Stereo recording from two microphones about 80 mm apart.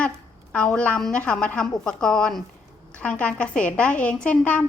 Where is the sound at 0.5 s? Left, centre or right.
Centre.